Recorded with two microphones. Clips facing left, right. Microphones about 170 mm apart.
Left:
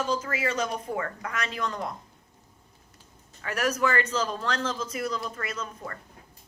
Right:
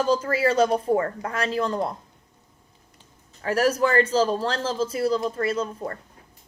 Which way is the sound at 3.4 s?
30° right (ahead or behind).